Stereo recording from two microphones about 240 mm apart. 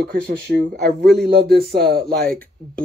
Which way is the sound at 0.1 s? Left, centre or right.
Right.